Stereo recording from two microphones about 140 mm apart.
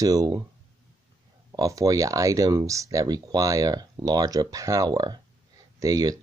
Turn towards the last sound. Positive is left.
turn(degrees=-25)  # may be behind; listen again after turning